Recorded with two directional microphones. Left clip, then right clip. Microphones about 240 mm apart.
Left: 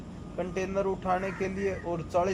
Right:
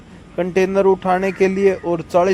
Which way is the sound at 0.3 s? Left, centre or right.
Right.